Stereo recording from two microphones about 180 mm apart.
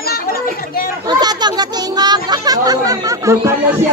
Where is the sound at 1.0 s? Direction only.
25° right (ahead or behind).